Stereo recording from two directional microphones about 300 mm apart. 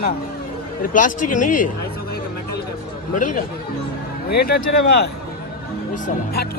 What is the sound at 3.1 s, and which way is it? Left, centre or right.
A man's voice, left.